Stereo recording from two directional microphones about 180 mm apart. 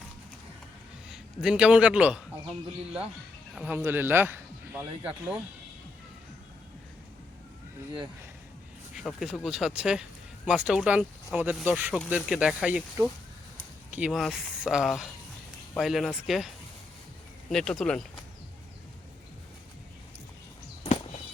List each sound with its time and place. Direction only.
1.1 s a man's voice: 5° right (ahead or behind)
3.5 s speech: 10° right (ahead or behind)
9.0 s speech: centre (ahead or behind)
17.5 s speech: centre (ahead or behind)
20.8 s a sound: 35° left (ahead or behind)